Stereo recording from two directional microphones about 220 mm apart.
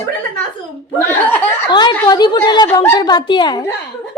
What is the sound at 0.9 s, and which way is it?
Chuckle, 10° left (ahead or behind).